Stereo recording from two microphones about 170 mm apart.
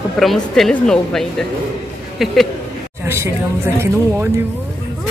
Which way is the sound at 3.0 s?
15° right (ahead or behind).